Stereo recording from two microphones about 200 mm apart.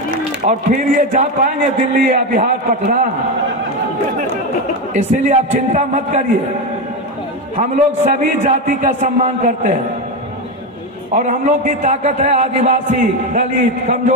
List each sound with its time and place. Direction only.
0.5 s a man's voice: 40° right (ahead or behind)
4.9 s a man's voice: 35° right (ahead or behind)
7.5 s a man's voice: 35° right (ahead or behind)
11.1 s a man's voice: 40° right (ahead or behind)